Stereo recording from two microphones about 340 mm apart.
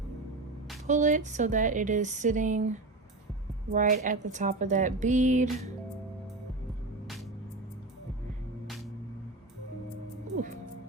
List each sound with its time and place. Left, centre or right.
0.9 s a woman's voice: right